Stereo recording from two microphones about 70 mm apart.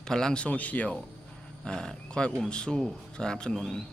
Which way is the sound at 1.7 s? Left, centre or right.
Centre.